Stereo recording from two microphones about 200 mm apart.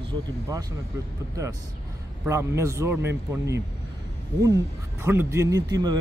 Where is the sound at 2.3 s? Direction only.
15° right (ahead or behind).